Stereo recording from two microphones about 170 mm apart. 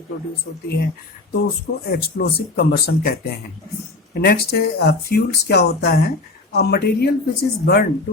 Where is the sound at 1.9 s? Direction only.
65° left (ahead or behind).